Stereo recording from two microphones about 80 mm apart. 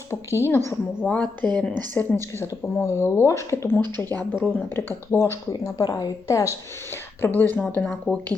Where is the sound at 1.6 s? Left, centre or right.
Centre.